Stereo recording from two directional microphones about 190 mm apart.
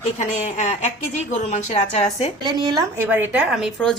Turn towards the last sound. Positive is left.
turn(degrees=0)  # may be behind; listen again after turning